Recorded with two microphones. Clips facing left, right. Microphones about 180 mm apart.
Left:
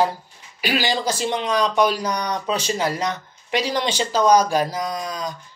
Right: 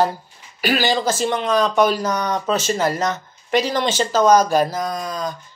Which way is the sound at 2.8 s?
45° right (ahead or behind).